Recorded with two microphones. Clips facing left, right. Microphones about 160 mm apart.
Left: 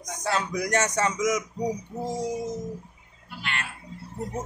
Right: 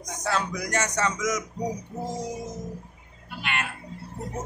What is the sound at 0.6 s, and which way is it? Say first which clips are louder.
Speech: left 3 dB; 55° left (ahead or behind).